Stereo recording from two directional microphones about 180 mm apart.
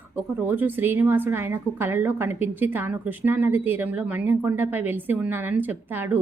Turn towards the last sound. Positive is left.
turn(degrees=-10)  # may be behind; listen again after turning